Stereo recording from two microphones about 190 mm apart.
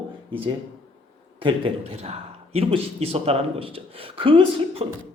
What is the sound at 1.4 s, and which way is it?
A man's voice, 30° right (ahead or behind).